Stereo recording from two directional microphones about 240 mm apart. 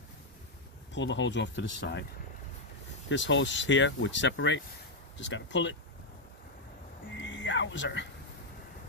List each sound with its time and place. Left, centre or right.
0.9 s speech: left
3.1 s speech: left
7.2 s a sound: left